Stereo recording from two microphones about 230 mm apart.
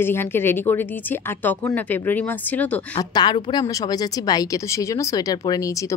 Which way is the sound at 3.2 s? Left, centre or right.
Centre.